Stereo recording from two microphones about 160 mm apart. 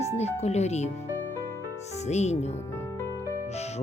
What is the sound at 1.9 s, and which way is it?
Speech, 45° left (ahead or behind).